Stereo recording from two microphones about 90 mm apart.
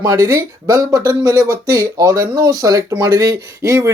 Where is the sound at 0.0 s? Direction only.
40° right (ahead or behind).